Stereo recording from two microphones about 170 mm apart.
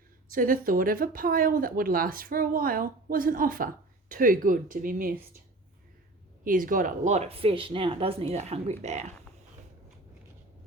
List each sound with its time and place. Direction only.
0.3 s speech: 55° right (ahead or behind)
6.4 s speech: 55° right (ahead or behind)